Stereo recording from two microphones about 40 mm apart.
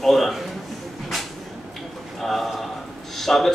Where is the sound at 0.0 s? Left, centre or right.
Centre.